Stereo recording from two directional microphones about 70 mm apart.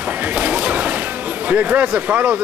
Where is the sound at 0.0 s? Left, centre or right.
Right.